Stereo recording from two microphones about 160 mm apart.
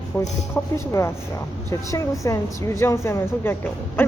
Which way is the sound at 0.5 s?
15° left (ahead or behind).